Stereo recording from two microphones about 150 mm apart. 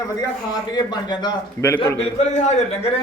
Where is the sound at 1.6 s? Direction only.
15° left (ahead or behind).